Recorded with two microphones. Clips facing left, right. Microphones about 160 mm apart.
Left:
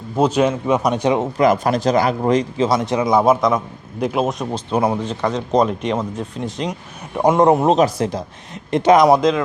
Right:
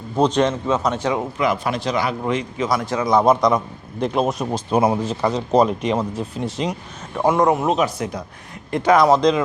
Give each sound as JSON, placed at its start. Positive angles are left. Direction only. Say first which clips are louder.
{"t": 0.2, "sound": "speech", "louder": "left 1 dB", "side_deg": 10}
{"t": 1.4, "sound": "speech", "louder": "left 5 dB", "side_deg": 40}
{"t": 2.6, "sound": "speech", "louder": "left 3 dB", "side_deg": 20}
{"t": 3.1, "sound": "speech", "louder": "even", "side_deg": 5}
{"t": 7.1, "sound": "speech", "louder": "left 3 dB", "side_deg": 20}
{"t": 8.7, "sound": "speech", "louder": "left 3 dB", "side_deg": 20}